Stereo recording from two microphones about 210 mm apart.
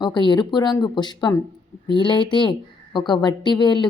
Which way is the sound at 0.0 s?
20° left (ahead or behind).